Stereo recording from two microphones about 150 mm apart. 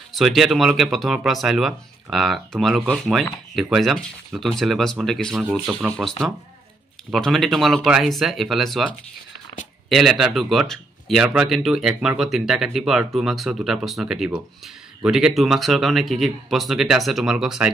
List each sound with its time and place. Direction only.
0.1 s speech: centre (ahead or behind)